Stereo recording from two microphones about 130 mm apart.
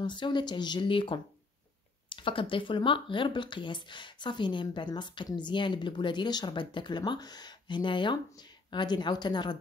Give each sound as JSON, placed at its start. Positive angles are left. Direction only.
{"t": 0.0, "sound": "speech", "side_deg": 35}